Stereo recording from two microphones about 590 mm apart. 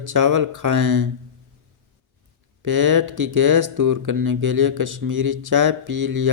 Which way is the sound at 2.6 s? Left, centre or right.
Right.